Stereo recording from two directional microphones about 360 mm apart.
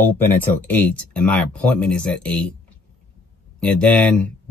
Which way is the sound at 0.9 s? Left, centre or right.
Centre.